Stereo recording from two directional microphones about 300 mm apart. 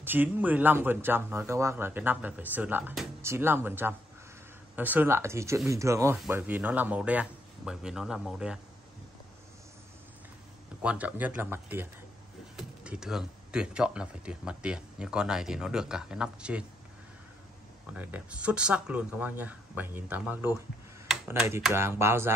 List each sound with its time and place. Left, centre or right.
0.0 s speech: centre
10.8 s speech: centre
17.8 s speech: centre